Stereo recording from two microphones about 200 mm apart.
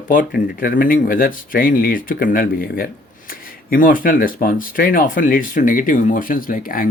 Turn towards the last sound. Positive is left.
turn(degrees=45)  # may be behind; listen again after turning